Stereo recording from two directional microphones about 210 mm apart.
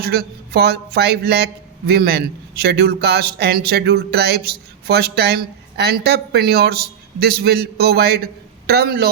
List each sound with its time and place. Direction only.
0.0 s a man's voice: 50° right (ahead or behind)